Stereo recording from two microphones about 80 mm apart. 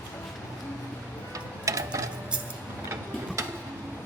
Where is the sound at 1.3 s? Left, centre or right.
Right.